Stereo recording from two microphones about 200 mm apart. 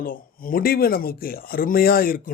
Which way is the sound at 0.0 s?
45° left (ahead or behind).